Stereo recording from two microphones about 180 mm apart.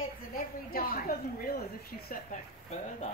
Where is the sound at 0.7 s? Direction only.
55° left (ahead or behind).